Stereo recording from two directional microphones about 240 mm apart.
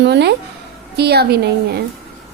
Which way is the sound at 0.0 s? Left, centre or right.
Right.